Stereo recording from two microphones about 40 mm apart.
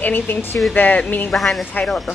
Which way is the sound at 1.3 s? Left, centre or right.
Centre.